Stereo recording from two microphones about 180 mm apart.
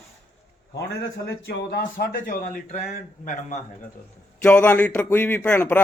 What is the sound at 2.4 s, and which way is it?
Speech, 40° left (ahead or behind).